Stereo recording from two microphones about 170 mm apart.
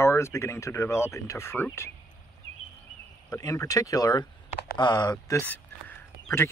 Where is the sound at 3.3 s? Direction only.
15° left (ahead or behind).